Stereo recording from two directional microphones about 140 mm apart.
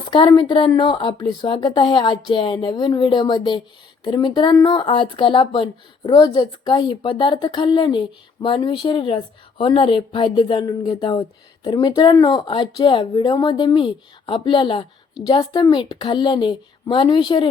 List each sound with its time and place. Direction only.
0.1 s a woman's voice: 35° left (ahead or behind)